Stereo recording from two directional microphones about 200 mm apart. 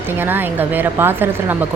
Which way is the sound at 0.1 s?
10° right (ahead or behind).